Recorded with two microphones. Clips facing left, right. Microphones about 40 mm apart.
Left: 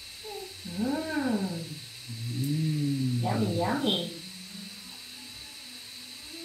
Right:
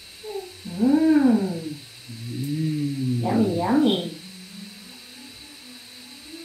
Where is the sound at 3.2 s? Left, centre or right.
Centre.